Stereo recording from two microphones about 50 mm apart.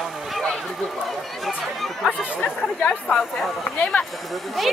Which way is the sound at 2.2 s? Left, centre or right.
Left.